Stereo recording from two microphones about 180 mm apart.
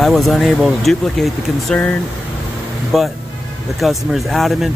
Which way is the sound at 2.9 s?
Centre (ahead or behind).